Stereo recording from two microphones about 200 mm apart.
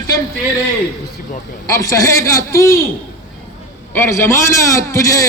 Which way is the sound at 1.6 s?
15° left (ahead or behind).